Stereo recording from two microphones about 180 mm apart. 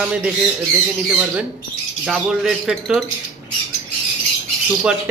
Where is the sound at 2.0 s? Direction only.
5° right (ahead or behind).